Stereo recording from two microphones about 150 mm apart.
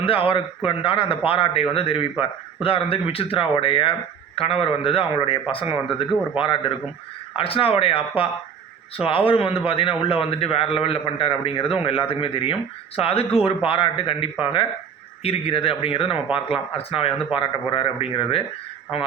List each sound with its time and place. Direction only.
0.0 s a man's voice: 35° left (ahead or behind)